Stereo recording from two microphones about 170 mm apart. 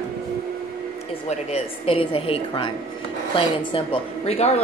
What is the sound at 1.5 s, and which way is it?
A woman's voice, 35° left (ahead or behind).